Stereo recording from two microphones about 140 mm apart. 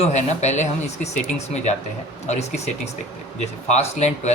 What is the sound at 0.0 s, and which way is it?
Speech, 55° left (ahead or behind).